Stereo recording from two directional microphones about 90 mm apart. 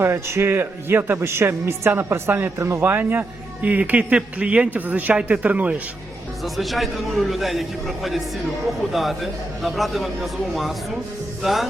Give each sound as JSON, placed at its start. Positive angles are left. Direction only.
{"t": 0.0, "sound": "speech", "side_deg": -30}
{"t": 6.4, "sound": "speech", "side_deg": 0}